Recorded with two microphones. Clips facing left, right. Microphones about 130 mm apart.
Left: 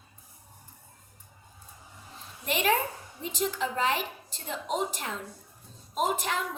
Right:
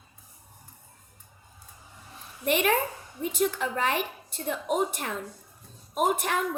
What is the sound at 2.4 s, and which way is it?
A woman's voice, 55° right (ahead or behind).